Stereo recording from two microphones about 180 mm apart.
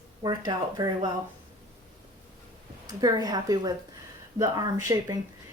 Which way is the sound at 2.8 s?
20° right (ahead or behind).